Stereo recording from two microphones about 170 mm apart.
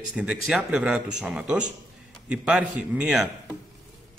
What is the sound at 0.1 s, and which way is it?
A man's voice, 5° right (ahead or behind).